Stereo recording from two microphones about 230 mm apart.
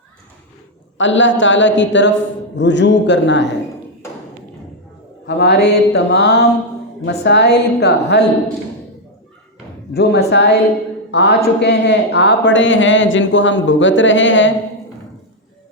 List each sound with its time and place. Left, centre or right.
0.9 s speech: left
5.2 s speech: left
9.9 s speech: left